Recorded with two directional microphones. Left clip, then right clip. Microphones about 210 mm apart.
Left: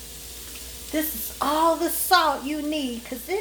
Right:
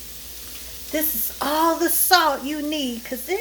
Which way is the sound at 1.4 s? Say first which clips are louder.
Right 1 dB; 30° right (ahead or behind).